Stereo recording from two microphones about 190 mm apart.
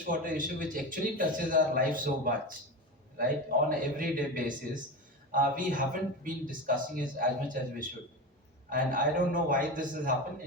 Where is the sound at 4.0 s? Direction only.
45° right (ahead or behind).